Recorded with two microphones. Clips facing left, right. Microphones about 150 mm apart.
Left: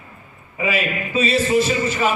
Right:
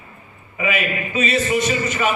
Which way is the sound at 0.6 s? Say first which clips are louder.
Even; 30° left (ahead or behind).